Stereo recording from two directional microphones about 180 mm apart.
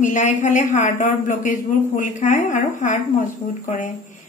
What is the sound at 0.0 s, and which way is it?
A man's voice, 45° left (ahead or behind).